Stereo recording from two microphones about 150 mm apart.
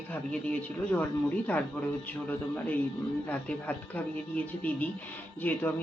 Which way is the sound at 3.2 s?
10° left (ahead or behind).